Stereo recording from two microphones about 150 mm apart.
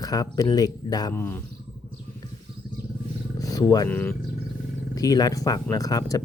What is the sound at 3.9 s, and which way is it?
Speech, 10° left (ahead or behind).